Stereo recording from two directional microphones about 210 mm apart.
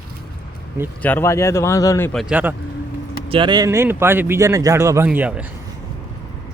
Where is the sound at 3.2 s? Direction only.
25° right (ahead or behind); by 5.5 s 5° right (ahead or behind).